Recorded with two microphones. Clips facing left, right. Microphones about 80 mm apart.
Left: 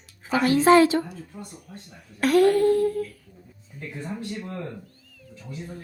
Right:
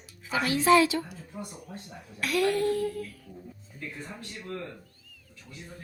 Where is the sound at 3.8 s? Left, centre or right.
Left.